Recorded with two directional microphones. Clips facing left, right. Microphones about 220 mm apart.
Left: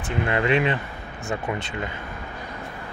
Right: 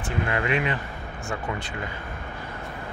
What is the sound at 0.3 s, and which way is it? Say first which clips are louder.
Speech: left 5 dB; 25° left (ahead or behind).